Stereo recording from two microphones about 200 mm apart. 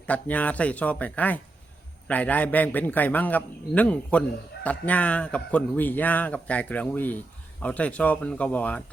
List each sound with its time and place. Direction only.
0.0 s a man's voice: 5° left (ahead or behind)